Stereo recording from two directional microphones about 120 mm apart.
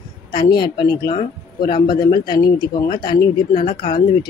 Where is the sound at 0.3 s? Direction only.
40° left (ahead or behind).